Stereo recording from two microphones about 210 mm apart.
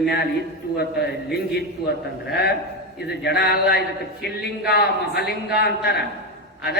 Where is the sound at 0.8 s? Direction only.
50° left (ahead or behind).